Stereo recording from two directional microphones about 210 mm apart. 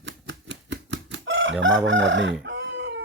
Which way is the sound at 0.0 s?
60° right (ahead or behind).